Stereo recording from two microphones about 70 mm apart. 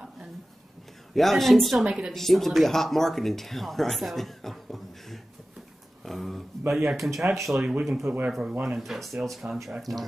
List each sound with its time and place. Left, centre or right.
1.1 s speech: centre
1.9 s a woman's voice: centre
2.1 s speech: centre
6.0 s a sound: centre
6.7 s speech: centre
8.1 s speech: right
8.6 s speech: centre